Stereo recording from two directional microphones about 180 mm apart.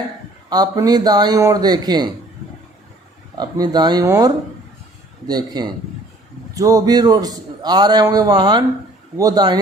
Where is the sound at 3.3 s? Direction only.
20° right (ahead or behind).